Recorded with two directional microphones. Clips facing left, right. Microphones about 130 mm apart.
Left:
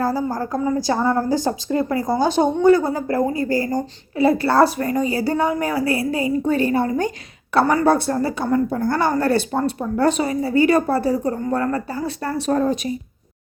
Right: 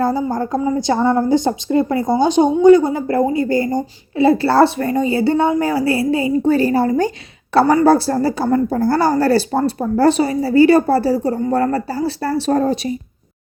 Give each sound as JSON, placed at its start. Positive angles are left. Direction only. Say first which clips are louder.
{"t": 0.0, "sound": "a woman's voice", "louder": "right 4 dB", "side_deg": -25}